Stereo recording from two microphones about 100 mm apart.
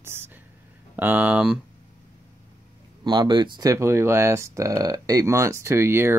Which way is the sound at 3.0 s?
45° right (ahead or behind).